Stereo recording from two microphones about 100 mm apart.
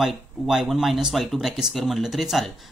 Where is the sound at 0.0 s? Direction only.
Centre (ahead or behind).